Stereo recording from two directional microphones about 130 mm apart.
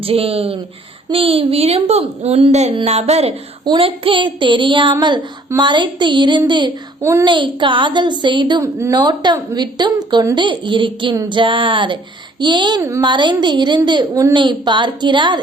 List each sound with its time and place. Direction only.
0.0 s a woman's voice: 50° right (ahead or behind)
7.0 s speech: 20° right (ahead or behind)
7.3 s a woman's voice: 40° right (ahead or behind)
8.6 s speech: 20° right (ahead or behind)
9.0 s a woman's voice: 35° right (ahead or behind)
14.3 s a woman's voice: 35° right (ahead or behind)